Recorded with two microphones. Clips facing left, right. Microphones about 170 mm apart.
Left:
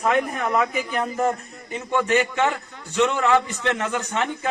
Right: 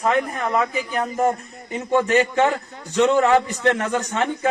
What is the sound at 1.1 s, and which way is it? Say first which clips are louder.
Speech: right 3 dB; 25° right (ahead or behind).